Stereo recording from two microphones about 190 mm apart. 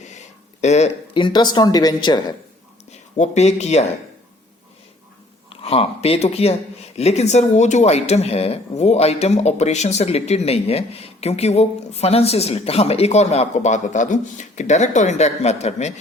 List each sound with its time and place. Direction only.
0.6 s speech: 35° left (ahead or behind)
3.2 s speech: 35° left (ahead or behind)
5.5 s speech: 30° left (ahead or behind)